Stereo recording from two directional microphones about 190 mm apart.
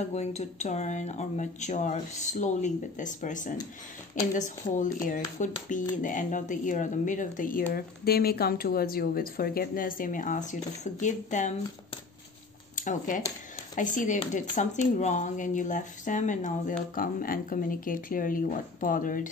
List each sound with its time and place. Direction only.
0.0 s speech: 35° left (ahead or behind)
12.7 s speech: 45° left (ahead or behind)